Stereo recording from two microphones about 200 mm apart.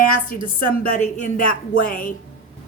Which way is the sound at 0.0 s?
40° left (ahead or behind).